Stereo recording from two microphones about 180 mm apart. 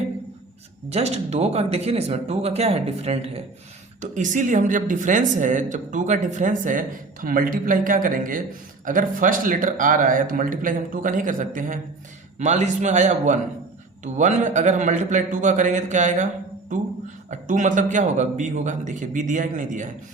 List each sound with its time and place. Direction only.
0.9 s a woman's voice: 35° right (ahead or behind)